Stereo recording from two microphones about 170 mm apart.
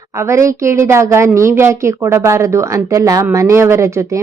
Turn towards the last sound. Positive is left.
turn(degrees=-15)  # may be behind; listen again after turning